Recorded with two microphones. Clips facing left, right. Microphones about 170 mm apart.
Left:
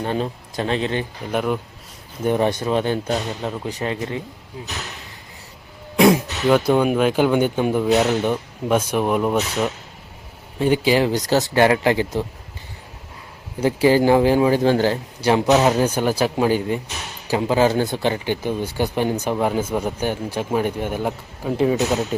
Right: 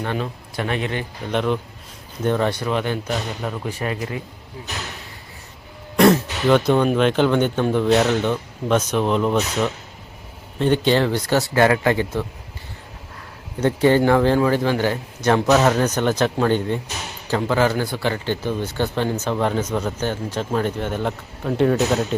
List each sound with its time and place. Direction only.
0.0 s a man's voice: 30° left (ahead or behind)
1.3 s a man's voice: 5° left (ahead or behind)
3.7 s speech: 20° left (ahead or behind)
3.9 s a man's voice: 30° left (ahead or behind)
6.0 s a man's voice: 10° left (ahead or behind)
11.1 s a man's voice: 40° left (ahead or behind)
11.3 s speech: 20° left (ahead or behind)
13.6 s a man's voice: 10° left (ahead or behind)
14.6 s a man's voice: 40° left (ahead or behind)
15.2 s a man's voice: 15° left (ahead or behind)